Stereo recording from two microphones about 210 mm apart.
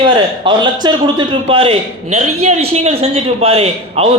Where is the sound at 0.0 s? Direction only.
20° right (ahead or behind).